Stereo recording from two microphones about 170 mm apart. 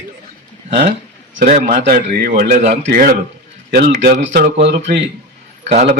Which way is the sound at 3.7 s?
60° right (ahead or behind).